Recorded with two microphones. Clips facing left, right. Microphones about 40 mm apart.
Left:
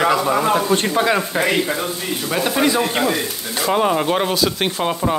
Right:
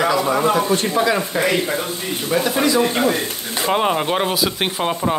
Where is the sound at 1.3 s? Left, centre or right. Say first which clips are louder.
Even; left.